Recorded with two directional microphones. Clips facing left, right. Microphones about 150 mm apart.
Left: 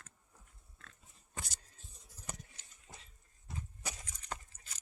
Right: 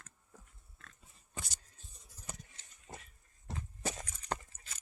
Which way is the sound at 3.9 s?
70° right (ahead or behind).